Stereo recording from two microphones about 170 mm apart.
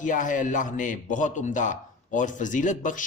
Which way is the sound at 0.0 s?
50° left (ahead or behind).